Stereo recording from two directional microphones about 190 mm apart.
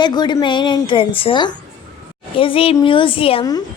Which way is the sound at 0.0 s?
25° left (ahead or behind).